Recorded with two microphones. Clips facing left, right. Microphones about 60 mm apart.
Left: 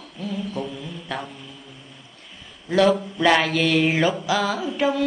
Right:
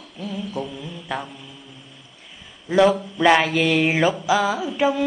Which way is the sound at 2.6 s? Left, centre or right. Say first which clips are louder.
Right 2 dB; centre.